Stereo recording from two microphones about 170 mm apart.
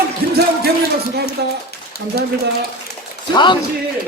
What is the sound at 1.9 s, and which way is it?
Speech, 65° left (ahead or behind).